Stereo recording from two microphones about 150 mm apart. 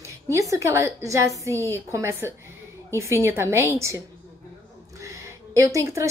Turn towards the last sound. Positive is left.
turn(degrees=-20)  # may be behind; listen again after turning